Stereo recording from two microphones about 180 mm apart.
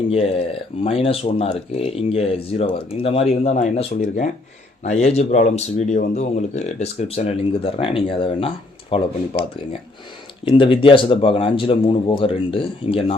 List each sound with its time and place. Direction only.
0.1 s speech: 35° left (ahead or behind)
10.4 s speech: 30° left (ahead or behind)